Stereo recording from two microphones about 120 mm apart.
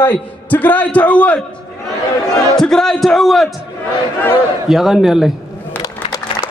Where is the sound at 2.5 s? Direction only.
5° left (ahead or behind).